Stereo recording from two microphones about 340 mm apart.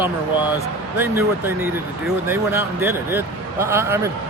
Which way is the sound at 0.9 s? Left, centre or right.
Centre.